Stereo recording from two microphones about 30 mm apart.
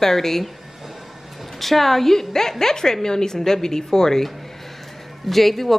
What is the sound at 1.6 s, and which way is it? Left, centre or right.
Speech, centre.